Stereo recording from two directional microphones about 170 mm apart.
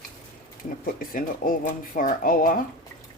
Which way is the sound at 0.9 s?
55° left (ahead or behind).